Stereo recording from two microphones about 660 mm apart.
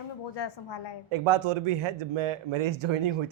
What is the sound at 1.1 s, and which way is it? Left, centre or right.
A man's voice, right.